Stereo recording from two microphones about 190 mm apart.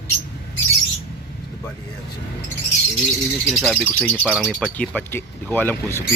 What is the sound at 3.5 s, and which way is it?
Speech, 5° right (ahead or behind).